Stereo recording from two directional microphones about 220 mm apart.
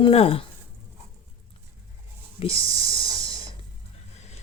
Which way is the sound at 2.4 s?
25° left (ahead or behind).